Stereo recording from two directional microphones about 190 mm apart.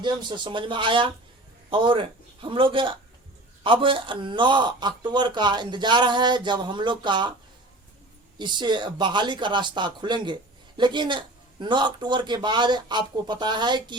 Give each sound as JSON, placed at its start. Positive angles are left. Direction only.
{"t": 0.0, "sound": "a man's voice", "side_deg": -25}
{"t": 8.4, "sound": "a man's voice", "side_deg": -25}